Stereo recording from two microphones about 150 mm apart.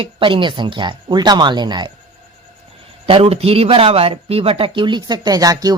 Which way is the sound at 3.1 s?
40° right (ahead or behind).